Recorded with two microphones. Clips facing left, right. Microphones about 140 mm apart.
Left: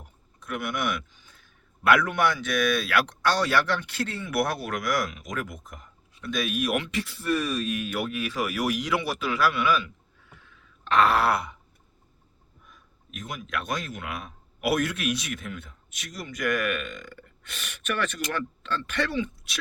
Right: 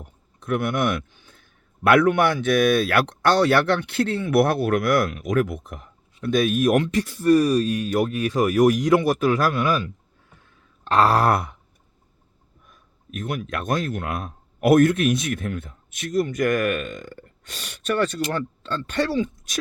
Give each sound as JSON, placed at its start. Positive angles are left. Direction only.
{"t": 0.0, "sound": "speech", "side_deg": -55}
{"t": 10.4, "sound": "a sound", "side_deg": -35}
{"t": 12.7, "sound": "speech", "side_deg": -50}